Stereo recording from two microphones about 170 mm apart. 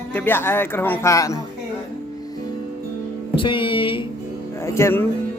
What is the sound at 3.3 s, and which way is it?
Music, 30° left (ahead or behind).